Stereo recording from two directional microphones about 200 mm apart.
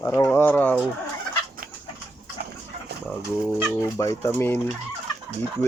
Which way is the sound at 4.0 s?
15° left (ahead or behind).